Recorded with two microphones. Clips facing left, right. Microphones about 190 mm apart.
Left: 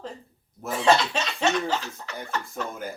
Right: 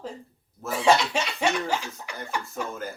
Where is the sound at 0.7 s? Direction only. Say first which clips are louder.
Even; 10° right (ahead or behind).